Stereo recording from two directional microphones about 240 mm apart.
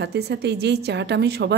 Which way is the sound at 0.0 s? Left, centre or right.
Right.